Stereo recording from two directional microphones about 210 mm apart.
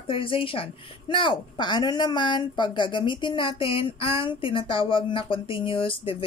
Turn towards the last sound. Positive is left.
turn(degrees=25)  # may be behind; listen again after turning